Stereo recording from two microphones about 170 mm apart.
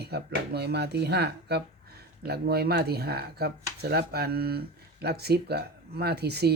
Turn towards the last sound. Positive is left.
turn(degrees=-70)  # may be behind; listen again after turning